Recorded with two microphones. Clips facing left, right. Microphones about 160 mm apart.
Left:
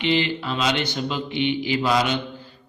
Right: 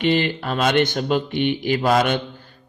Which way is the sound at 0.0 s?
50° right (ahead or behind).